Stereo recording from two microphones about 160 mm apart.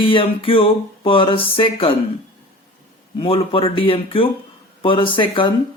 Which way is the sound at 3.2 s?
35° left (ahead or behind).